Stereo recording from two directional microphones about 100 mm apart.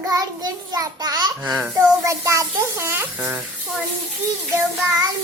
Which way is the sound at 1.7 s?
30° right (ahead or behind).